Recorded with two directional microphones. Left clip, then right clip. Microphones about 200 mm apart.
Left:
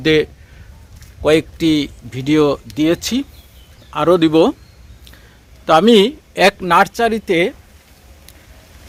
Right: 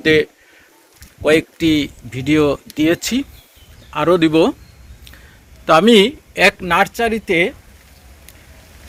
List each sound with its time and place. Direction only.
0.0 s speech: 10° left (ahead or behind)
5.6 s speech: 5° left (ahead or behind)
6.3 s speech: 25° left (ahead or behind)